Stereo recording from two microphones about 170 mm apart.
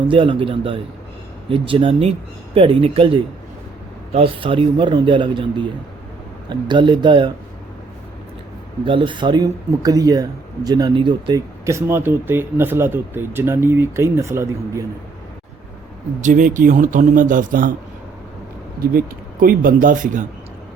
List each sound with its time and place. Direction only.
0.1 s a man's voice: 30° right (ahead or behind)
8.8 s speech: 30° right (ahead or behind)
16.2 s a man's voice: 50° right (ahead or behind)
18.9 s speech: 60° right (ahead or behind)